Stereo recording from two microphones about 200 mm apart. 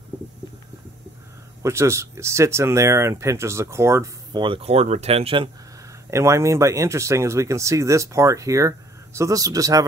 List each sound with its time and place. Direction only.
1.6 s speech: 15° right (ahead or behind)
6.0 s speech: 15° right (ahead or behind)